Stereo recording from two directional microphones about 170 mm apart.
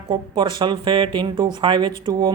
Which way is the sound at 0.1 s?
30° right (ahead or behind).